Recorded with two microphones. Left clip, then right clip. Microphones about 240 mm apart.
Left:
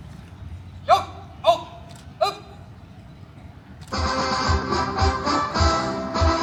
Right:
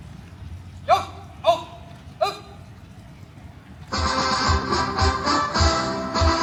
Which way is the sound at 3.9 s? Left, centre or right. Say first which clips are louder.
Right 1 dB; centre.